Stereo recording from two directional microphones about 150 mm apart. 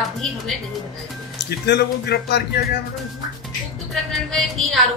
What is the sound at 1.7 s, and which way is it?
Speech, 90° left.